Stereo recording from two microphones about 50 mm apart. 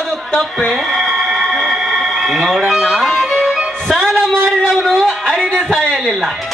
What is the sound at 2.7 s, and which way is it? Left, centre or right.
Music, centre.